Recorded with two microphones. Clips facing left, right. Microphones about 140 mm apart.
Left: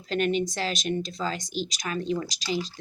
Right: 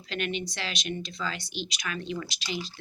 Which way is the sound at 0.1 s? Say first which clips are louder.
Left 7 dB; 40° left (ahead or behind).